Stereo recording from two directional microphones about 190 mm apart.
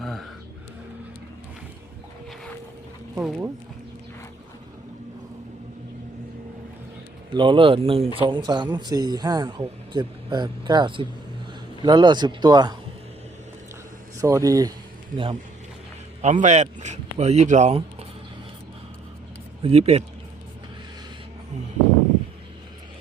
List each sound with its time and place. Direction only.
0.0 s a sound: centre (ahead or behind)
3.2 s speech: 5° right (ahead or behind)
7.3 s speech: 25° right (ahead or behind)
14.2 s speech: 15° right (ahead or behind)
16.2 s speech: 40° right (ahead or behind)
19.6 s speech: 30° right (ahead or behind)